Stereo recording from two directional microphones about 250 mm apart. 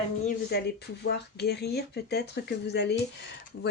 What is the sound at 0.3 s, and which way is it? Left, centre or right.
Speech, left.